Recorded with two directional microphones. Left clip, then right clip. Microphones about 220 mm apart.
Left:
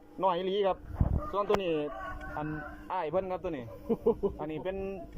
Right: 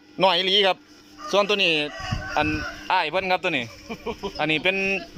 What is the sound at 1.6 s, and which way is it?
Speech, 65° right (ahead or behind).